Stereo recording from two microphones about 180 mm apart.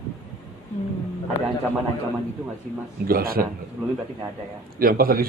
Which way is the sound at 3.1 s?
55° right (ahead or behind).